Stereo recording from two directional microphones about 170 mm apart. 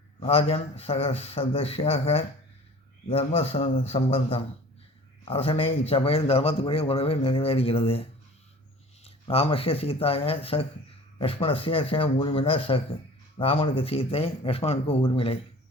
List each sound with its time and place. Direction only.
0.2 s a man's voice: 35° left (ahead or behind)
9.0 s a man's voice: 35° left (ahead or behind)